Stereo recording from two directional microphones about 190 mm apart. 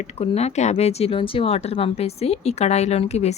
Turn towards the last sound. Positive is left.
turn(degrees=35)  # may be behind; listen again after turning